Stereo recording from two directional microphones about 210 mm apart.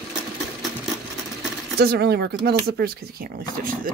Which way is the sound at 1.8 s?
50° right (ahead or behind).